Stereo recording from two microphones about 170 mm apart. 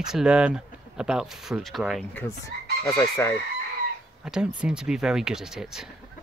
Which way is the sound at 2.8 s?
15° left (ahead or behind).